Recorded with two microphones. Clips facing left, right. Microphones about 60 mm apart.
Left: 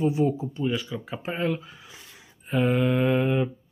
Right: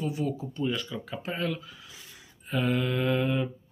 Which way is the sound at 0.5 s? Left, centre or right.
Centre.